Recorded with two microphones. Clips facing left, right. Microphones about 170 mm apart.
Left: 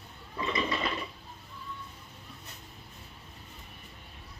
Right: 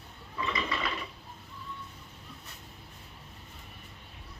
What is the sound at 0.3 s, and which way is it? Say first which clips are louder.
Toilet flush: left 2 dB; 25° left (ahead or behind).